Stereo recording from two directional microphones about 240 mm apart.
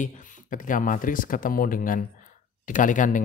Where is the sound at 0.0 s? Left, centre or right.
Left.